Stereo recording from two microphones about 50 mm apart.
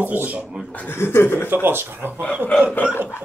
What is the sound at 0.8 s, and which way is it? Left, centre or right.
Speech, left.